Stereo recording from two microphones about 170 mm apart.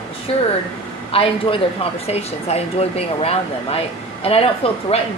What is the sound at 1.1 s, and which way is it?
A woman's voice, 30° left (ahead or behind).